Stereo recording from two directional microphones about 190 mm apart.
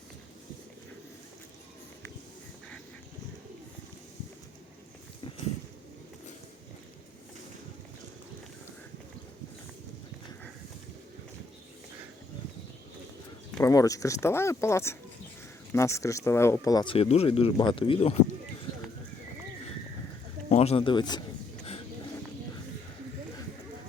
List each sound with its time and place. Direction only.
13.6 s speech: 15° left (ahead or behind)
20.5 s speech: 35° left (ahead or behind)